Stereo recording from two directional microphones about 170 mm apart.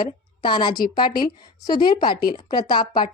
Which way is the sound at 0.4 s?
25° left (ahead or behind).